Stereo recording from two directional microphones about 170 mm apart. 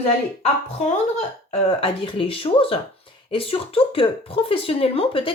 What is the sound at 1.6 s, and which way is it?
Speech, 30° left (ahead or behind).